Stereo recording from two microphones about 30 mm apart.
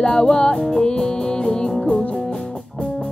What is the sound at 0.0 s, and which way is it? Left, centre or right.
Music, left.